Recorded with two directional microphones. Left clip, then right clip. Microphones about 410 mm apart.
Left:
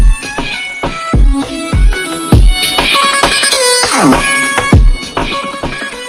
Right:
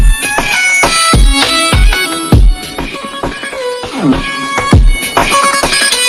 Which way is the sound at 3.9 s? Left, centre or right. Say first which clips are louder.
Left 2 dB; left.